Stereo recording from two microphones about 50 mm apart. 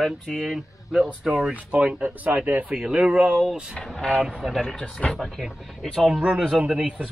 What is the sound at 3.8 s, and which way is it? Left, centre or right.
Speech, centre.